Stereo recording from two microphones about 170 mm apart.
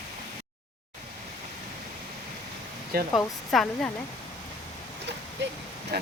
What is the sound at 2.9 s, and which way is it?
Speech, 60° right (ahead or behind).